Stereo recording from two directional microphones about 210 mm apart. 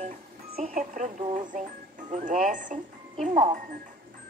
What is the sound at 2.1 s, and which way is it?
Speech, 40° right (ahead or behind).